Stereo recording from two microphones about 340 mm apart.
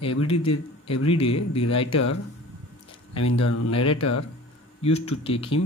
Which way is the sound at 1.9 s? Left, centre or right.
Left.